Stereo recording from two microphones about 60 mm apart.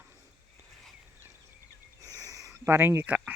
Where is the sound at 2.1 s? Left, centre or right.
Right.